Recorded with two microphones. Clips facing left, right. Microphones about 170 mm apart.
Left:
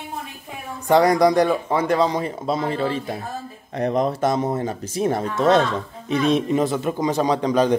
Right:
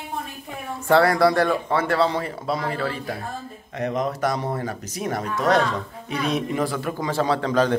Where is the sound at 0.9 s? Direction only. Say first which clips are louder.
Left 2 dB; 15° left (ahead or behind).